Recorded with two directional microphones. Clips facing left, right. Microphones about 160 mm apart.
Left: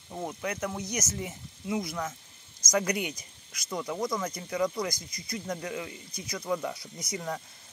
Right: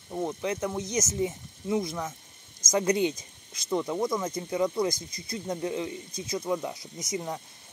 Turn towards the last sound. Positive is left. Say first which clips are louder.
# right 2 dB
turn(degrees=-20)  # may be behind; listen again after turning